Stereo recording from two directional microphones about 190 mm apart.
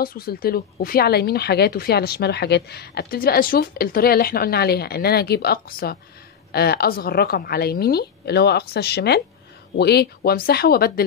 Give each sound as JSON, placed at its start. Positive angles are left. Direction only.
{"t": 0.0, "sound": "speech", "side_deg": 50}